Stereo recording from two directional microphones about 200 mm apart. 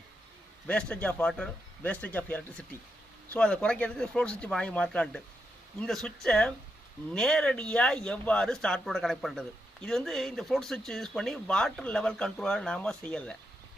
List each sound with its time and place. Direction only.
0.7 s speech: 5° left (ahead or behind)